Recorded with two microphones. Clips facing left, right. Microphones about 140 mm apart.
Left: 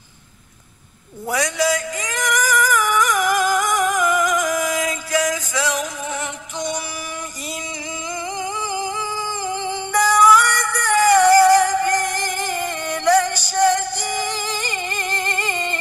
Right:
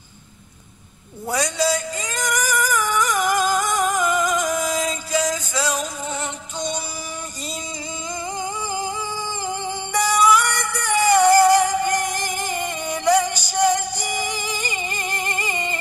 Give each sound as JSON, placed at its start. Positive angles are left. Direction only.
{"t": 1.2, "sound": "a sound", "side_deg": -25}
{"t": 5.5, "sound": "music", "side_deg": -25}
{"t": 9.9, "sound": "music", "side_deg": -20}